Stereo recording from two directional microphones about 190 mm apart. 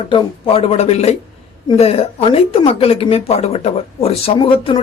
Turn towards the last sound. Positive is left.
turn(degrees=30)  # may be behind; listen again after turning